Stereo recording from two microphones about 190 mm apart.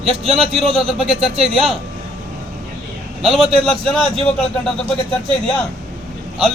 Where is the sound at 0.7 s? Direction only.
Centre (ahead or behind).